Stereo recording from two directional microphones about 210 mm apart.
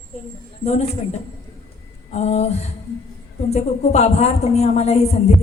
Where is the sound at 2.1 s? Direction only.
30° left (ahead or behind).